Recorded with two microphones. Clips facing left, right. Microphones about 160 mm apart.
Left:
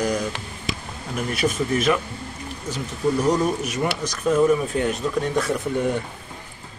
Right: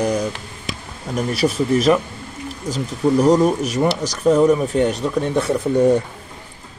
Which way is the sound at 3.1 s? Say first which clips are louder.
Right 8 dB; 40° right (ahead or behind).